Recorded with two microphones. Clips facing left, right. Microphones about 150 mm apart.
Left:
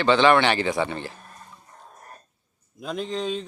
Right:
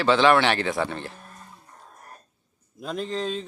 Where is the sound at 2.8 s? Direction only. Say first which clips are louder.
Even; centre (ahead or behind).